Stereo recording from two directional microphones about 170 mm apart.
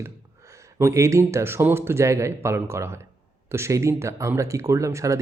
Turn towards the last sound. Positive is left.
turn(degrees=-20)  # may be behind; listen again after turning